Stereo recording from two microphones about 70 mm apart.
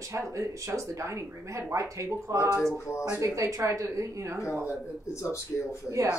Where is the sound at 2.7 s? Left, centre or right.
Left.